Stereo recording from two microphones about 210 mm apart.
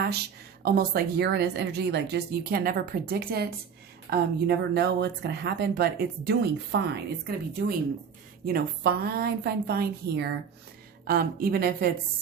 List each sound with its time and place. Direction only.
0.6 s speech: 45° right (ahead or behind)
8.4 s speech: 45° right (ahead or behind)